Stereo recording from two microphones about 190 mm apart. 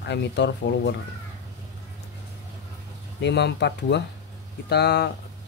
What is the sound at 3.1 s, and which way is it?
Speech, 65° left (ahead or behind).